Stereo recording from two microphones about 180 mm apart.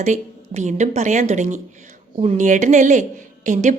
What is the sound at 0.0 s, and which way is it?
A woman's voice, 40° right (ahead or behind).